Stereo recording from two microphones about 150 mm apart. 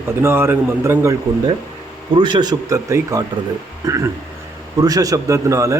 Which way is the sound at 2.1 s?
30° right (ahead or behind).